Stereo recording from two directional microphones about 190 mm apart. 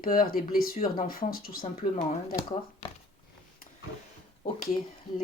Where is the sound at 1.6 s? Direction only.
35° left (ahead or behind).